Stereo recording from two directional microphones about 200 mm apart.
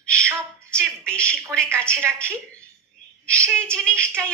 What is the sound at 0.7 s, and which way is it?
Speech, 5° left (ahead or behind).